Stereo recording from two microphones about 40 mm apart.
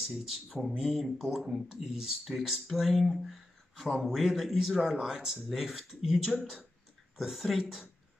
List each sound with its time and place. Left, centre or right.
0.0 s speech: centre
4.2 s speech: centre